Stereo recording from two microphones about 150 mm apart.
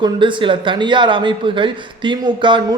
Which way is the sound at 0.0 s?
30° right (ahead or behind).